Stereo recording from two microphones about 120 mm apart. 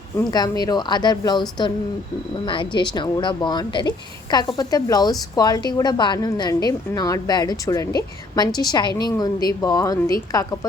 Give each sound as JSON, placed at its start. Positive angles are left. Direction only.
{"t": 0.3, "sound": "a woman's voice", "side_deg": 35}